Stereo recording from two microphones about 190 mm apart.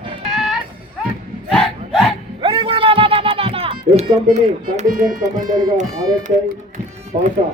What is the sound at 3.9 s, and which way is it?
Speech, 35° right (ahead or behind).